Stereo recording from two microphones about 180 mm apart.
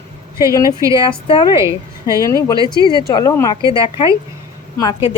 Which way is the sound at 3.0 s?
20° left (ahead or behind).